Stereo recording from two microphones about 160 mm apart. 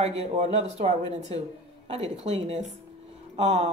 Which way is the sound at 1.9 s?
40° right (ahead or behind).